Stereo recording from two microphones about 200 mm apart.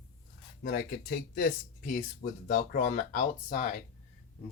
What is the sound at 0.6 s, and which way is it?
Speech, 50° left (ahead or behind).